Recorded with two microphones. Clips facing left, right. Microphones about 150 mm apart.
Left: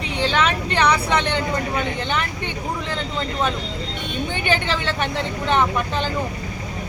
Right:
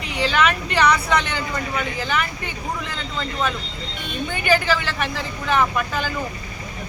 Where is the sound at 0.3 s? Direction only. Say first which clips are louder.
Right 1 dB; 30° left (ahead or behind).